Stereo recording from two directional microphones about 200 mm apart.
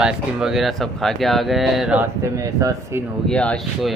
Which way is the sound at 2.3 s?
15° right (ahead or behind).